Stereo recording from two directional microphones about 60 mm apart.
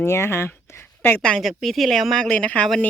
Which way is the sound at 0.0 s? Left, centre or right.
Left.